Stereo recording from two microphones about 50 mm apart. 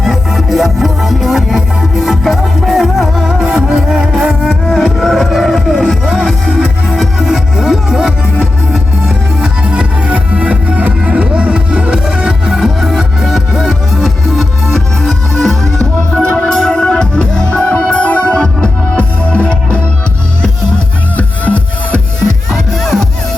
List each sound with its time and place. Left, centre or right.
0.0 s music: centre
4.8 s music: centre
5.5 s music: centre
9.4 s music: centre; by 19.8 s left
21.2 s music: left
22.4 s music: centre